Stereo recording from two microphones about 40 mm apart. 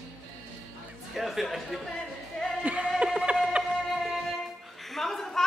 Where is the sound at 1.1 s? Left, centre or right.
Centre.